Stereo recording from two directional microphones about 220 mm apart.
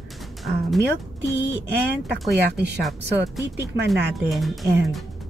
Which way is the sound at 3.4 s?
50° right (ahead or behind).